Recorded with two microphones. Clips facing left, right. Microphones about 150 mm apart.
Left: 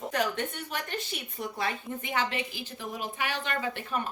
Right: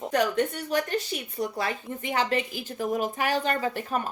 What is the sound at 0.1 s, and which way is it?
Speech, 40° right (ahead or behind).